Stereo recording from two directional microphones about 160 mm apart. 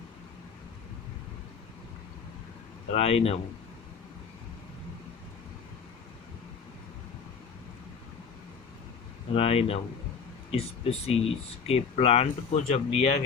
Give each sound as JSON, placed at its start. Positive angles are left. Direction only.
{"t": 2.9, "sound": "speech", "side_deg": 40}
{"t": 9.3, "sound": "speech", "side_deg": 40}